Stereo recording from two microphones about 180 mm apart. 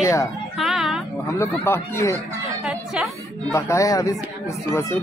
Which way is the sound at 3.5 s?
15° left (ahead or behind).